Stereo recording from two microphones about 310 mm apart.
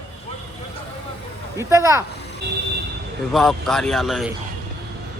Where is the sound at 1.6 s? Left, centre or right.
Centre.